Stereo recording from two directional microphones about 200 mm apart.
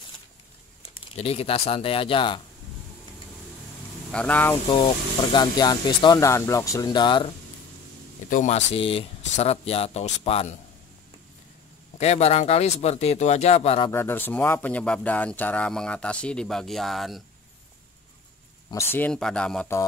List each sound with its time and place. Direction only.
1.1 s speech: 30° left (ahead or behind)
4.1 s speech: 5° left (ahead or behind)
5.3 s speech: 20° left (ahead or behind)
8.3 s speech: 35° left (ahead or behind)
12.0 s speech: 30° left (ahead or behind)
13.9 s speech: 10° left (ahead or behind)
18.7 s speech: 15° left (ahead or behind)